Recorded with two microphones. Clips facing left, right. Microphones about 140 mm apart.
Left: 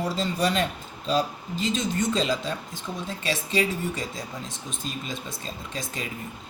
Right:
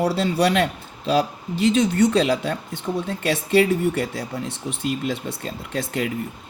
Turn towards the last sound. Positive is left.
turn(degrees=-65)  # may be behind; listen again after turning